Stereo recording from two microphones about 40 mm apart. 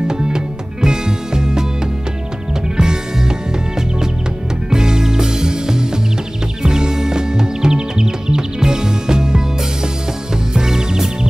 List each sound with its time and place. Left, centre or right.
0.1 s music: centre
2.8 s music: centre
10.5 s music: centre